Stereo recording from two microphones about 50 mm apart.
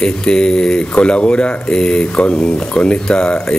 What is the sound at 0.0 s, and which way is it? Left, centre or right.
Speech, centre.